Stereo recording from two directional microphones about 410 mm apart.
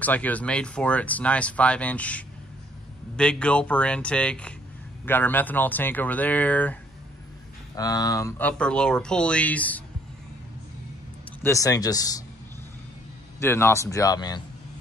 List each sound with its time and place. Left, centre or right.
0.0 s speech: centre
11.4 s speech: centre
13.4 s speech: centre